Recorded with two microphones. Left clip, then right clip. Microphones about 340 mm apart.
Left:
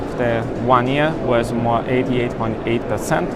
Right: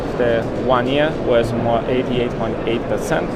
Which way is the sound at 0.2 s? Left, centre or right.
Left.